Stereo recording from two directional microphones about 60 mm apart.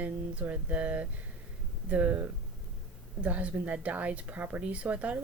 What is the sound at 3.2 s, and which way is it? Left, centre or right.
A woman's voice, right.